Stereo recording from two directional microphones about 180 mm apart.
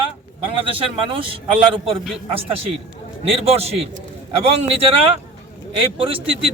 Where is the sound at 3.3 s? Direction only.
35° right (ahead or behind).